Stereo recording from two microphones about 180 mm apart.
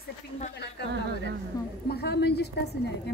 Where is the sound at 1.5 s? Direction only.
20° left (ahead or behind).